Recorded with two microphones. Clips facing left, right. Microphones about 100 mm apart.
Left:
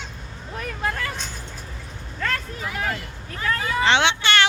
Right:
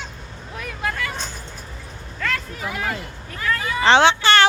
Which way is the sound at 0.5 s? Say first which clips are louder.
Left 1 dB; 35° left (ahead or behind).